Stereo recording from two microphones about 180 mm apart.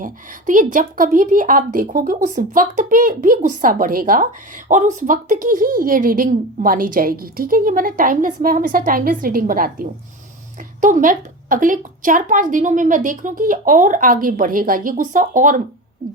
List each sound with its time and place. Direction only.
0.0 s a woman's voice: 50° right (ahead or behind)